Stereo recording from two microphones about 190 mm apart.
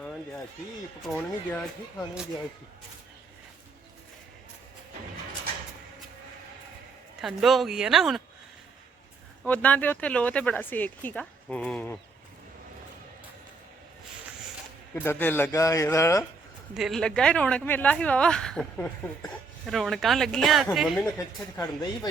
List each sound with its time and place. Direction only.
1.1 s speech: 10° left (ahead or behind)
7.2 s speech: centre (ahead or behind)
9.4 s speech: 5° left (ahead or behind)
14.9 s speech: 10° left (ahead or behind)
16.7 s speech: centre (ahead or behind)
21.0 s speech: 15° left (ahead or behind)